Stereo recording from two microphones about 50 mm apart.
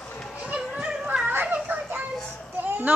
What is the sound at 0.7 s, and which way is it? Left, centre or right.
Children playing, right.